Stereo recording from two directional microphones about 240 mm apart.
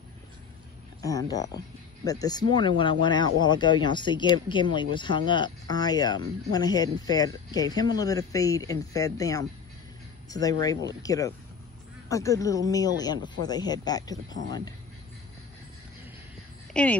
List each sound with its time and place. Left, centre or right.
1.0 s speech: centre
16.8 s speech: centre